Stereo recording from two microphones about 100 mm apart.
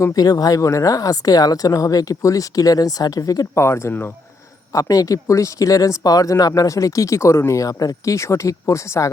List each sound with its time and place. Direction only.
0.0 s speech: 35° left (ahead or behind)
4.7 s speech: 35° left (ahead or behind)